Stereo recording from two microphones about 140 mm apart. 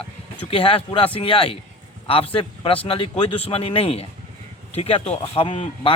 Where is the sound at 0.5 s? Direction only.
40° left (ahead or behind).